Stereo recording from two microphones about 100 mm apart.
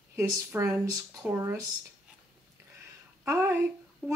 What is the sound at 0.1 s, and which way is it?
Speech, 25° right (ahead or behind).